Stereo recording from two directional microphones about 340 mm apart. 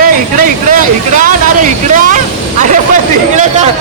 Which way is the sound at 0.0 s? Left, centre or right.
Right.